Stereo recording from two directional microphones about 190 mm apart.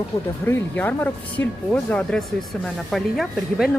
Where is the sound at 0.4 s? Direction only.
10° left (ahead or behind).